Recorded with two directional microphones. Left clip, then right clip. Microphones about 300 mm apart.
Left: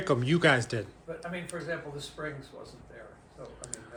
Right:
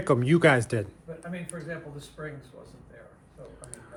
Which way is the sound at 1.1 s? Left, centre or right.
Left.